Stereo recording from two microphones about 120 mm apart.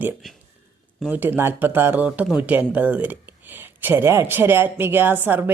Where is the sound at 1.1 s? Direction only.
15° right (ahead or behind).